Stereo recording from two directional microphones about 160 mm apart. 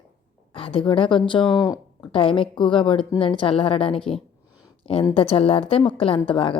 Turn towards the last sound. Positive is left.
turn(degrees=35)  # may be behind; listen again after turning